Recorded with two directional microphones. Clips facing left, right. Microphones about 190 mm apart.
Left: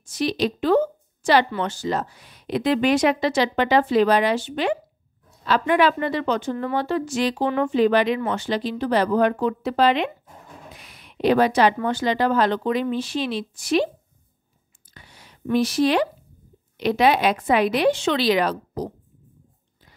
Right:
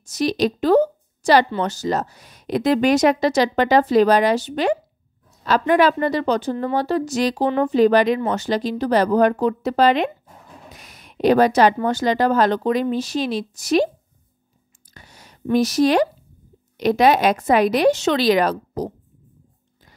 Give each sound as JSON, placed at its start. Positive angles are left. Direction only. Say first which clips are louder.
{"t": 0.0, "sound": "a woman's voice", "louder": "right 3 dB", "side_deg": -40}
{"t": 15.0, "sound": "a sound", "louder": "right 2 dB", "side_deg": -40}
{"t": 15.5, "sound": "speech", "louder": "right 3 dB", "side_deg": -40}